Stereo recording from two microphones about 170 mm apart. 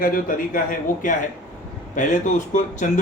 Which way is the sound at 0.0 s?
55° left (ahead or behind).